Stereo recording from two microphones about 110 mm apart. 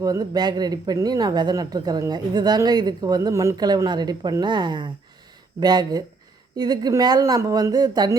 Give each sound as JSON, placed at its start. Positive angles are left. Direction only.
{"t": 0.0, "sound": "speech", "side_deg": -35}